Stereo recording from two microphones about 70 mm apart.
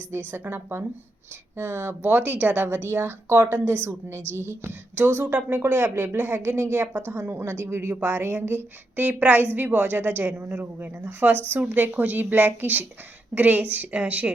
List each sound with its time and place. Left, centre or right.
0.3 s a woman's voice: right